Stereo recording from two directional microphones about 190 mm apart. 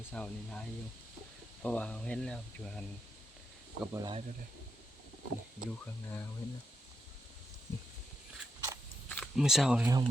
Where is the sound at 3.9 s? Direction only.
20° right (ahead or behind).